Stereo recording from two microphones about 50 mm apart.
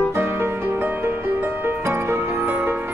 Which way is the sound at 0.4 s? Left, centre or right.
Right.